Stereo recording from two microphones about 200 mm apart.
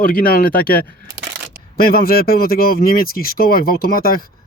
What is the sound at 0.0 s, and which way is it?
Speech, 45° left (ahead or behind).